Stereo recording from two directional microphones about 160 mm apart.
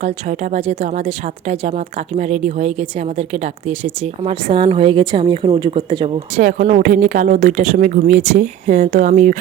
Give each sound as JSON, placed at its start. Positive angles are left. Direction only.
{"t": 0.0, "sound": "speech", "side_deg": -45}
{"t": 6.3, "sound": "speech", "side_deg": -60}